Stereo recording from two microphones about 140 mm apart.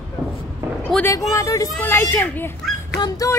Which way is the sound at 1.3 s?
25° left (ahead or behind).